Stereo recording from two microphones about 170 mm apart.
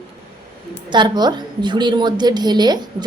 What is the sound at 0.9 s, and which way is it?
A woman's voice, 25° right (ahead or behind).